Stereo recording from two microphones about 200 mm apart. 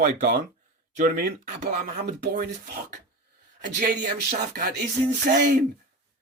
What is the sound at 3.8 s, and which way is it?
Speech, 40° right (ahead or behind).